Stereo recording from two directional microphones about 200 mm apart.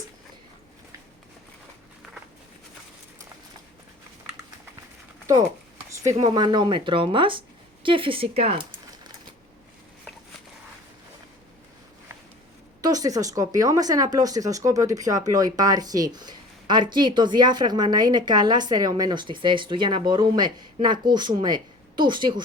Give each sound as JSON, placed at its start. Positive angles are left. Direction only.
{"t": 6.1, "sound": "speech", "side_deg": -20}
{"t": 12.8, "sound": "speech", "side_deg": -20}